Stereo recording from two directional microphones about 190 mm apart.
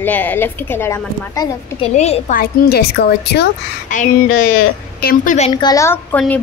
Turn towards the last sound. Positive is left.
turn(degrees=10)  # may be behind; listen again after turning